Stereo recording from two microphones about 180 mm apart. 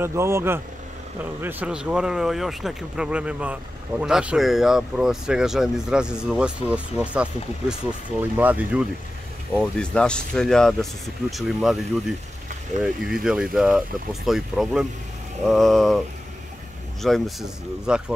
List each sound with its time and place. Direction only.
0.0 s speech: 15° right (ahead or behind)
9.5 s speech: 5° left (ahead or behind)
12.8 s speech: 5° right (ahead or behind)
17.0 s speech: centre (ahead or behind)